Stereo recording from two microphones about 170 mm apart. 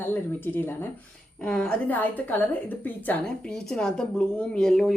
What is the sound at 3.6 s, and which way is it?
A woman's voice, 5° left (ahead or behind).